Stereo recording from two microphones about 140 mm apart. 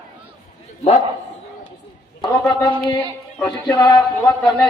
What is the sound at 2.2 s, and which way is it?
Speech, 35° left (ahead or behind).